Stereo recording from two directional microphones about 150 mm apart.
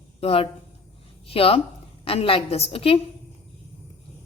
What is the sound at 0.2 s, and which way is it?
A woman's voice, 40° left (ahead or behind).